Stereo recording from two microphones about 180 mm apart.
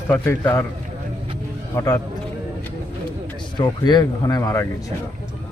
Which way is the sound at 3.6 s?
25° left (ahead or behind).